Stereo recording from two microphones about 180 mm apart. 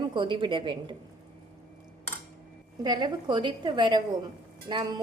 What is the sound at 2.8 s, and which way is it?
Cutlery, 25° right (ahead or behind).